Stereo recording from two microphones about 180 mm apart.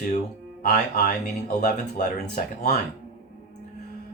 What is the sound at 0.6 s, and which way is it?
Speech, 55° left (ahead or behind).